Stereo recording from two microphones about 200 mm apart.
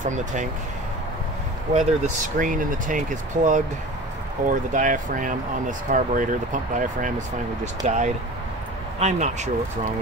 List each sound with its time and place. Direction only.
0.0 s speech: 40° right (ahead or behind)
1.7 s speech: 40° right (ahead or behind)